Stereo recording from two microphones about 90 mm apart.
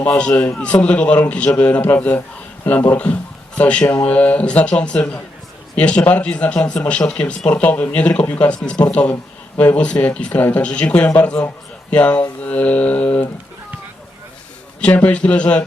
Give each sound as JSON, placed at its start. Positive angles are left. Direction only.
{"t": 0.0, "sound": "a man's voice", "side_deg": 10}
{"t": 12.4, "sound": "mantra", "side_deg": 15}
{"t": 14.8, "sound": "speech", "side_deg": 15}